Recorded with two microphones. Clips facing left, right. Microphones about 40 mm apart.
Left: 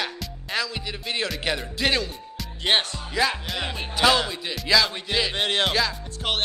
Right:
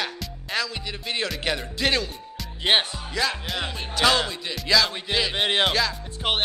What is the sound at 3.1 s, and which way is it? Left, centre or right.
Speech, centre.